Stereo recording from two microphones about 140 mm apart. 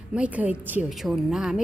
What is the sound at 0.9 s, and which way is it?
Speech, centre (ahead or behind).